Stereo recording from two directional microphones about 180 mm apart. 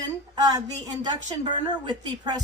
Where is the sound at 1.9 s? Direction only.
25° right (ahead or behind).